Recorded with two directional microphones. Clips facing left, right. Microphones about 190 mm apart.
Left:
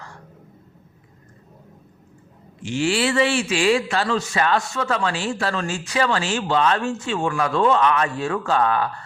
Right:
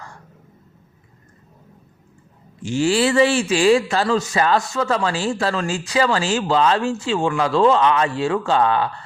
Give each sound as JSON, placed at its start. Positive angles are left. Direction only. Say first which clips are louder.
{"t": 2.6, "sound": "speech", "louder": "right 3 dB", "side_deg": -40}